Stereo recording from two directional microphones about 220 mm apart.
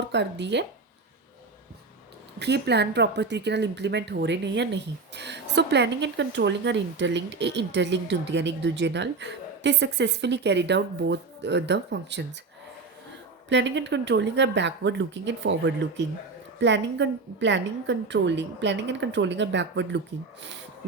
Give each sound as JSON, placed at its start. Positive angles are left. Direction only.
{"t": 0.1, "sound": "a woman's voice", "side_deg": -50}
{"t": 2.4, "sound": "a woman's voice", "side_deg": -50}
{"t": 13.5, "sound": "a woman's voice", "side_deg": -55}